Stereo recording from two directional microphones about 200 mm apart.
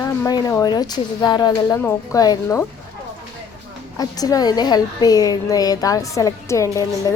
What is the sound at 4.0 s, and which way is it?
A woman's voice, 20° left (ahead or behind).